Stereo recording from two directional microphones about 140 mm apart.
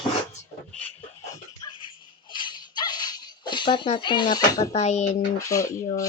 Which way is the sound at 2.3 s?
35° left (ahead or behind).